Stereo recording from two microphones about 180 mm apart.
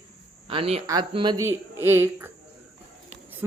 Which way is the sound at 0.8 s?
20° right (ahead or behind).